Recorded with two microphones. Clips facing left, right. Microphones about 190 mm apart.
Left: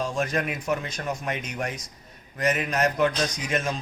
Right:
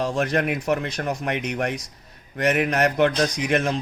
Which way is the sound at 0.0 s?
65° right (ahead or behind).